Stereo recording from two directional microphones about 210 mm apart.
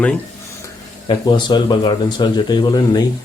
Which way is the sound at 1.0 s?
20° left (ahead or behind).